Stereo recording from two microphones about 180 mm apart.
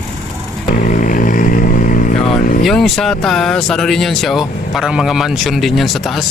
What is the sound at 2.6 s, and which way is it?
Speech, centre (ahead or behind).